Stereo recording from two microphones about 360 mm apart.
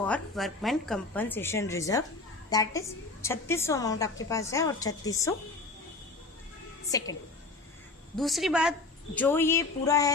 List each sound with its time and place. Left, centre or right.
0.0 s a woman's voice: centre
6.9 s a woman's voice: centre
8.1 s a woman's voice: centre